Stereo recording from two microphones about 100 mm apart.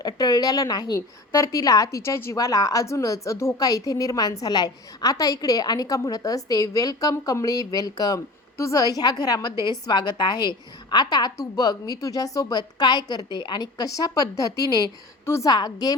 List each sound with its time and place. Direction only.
0.0 s a woman's voice: 40° left (ahead or behind)